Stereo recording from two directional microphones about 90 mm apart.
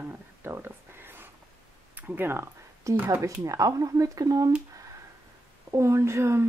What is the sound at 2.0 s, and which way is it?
Speech, 25° right (ahead or behind).